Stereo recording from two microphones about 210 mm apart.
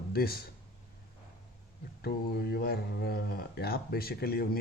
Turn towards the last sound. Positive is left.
turn(degrees=45)  # may be behind; listen again after turning